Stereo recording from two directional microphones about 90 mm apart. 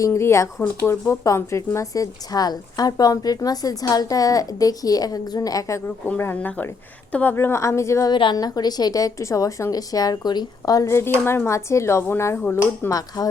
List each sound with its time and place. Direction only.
0.0 s speech: 30° left (ahead or behind)
6.1 s speech: 20° left (ahead or behind)
8.1 s a woman's voice: 60° left (ahead or behind)
10.8 s speech: 30° left (ahead or behind)
12.9 s a woman's voice: 45° left (ahead or behind)